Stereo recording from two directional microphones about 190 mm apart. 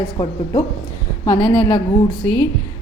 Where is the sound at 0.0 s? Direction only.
20° left (ahead or behind).